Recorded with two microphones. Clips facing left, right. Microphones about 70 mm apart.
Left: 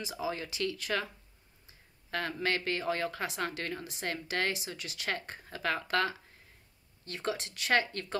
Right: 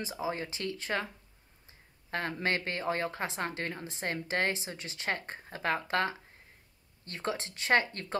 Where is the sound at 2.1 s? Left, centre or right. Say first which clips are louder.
Right 1 dB; right.